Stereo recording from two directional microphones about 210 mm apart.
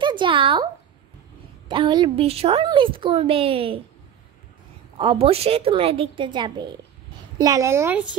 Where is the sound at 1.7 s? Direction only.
20° right (ahead or behind).